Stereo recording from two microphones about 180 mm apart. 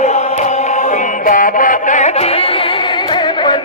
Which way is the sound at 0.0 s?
40° left (ahead or behind).